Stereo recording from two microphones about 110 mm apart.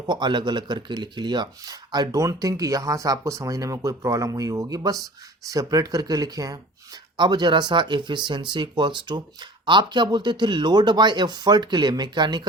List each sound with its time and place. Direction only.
0.1 s speech: 40° right (ahead or behind)